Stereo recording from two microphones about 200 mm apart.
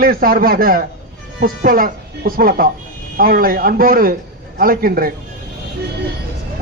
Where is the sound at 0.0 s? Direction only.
45° right (ahead or behind).